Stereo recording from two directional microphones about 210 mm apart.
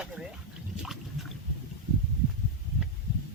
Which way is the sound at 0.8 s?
Centre (ahead or behind).